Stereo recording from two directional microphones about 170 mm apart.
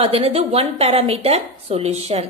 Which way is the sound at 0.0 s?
35° right (ahead or behind).